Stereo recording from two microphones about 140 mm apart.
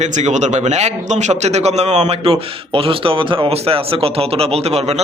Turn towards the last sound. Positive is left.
turn(degrees=-45)  # may be behind; listen again after turning